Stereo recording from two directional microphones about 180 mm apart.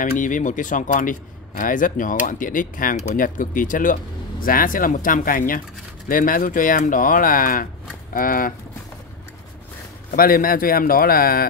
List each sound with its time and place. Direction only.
0.0 s speech: 45° left (ahead or behind)
10.1 s a man's voice: 55° left (ahead or behind)